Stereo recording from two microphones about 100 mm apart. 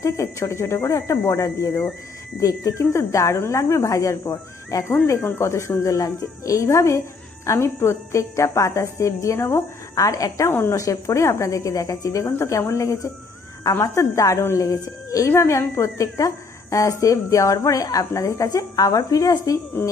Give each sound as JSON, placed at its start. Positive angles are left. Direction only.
{"t": 0.0, "sound": "a woman's voice", "side_deg": 30}